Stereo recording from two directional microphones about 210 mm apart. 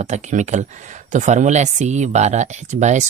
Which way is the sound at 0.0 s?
35° right (ahead or behind).